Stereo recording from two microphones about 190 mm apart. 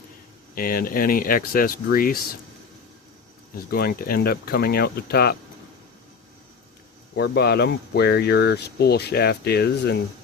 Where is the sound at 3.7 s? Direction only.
55° left (ahead or behind).